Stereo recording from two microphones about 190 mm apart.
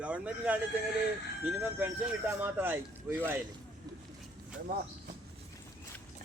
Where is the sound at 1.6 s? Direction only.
5° right (ahead or behind).